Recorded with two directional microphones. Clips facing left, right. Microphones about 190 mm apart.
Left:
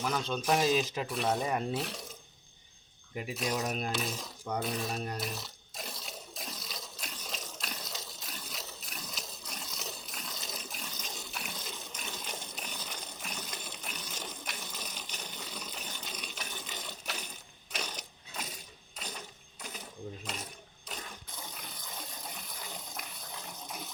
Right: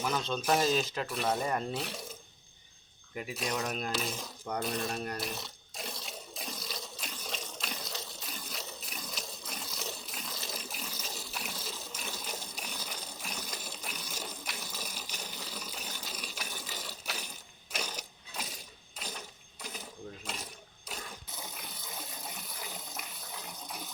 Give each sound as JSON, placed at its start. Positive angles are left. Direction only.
{"t": 0.2, "sound": "speech", "side_deg": 10}
{"t": 0.4, "sound": "speech", "side_deg": 0}
{"t": 0.8, "sound": "speech", "side_deg": 15}
{"t": 1.0, "sound": "speech", "side_deg": 0}
{"t": 3.3, "sound": "a sound", "side_deg": 0}
{"t": 18.9, "sound": "mechanisms", "side_deg": -5}
{"t": 20.8, "sound": "sewing machine", "side_deg": -5}
{"t": 22.4, "sound": "water", "side_deg": -5}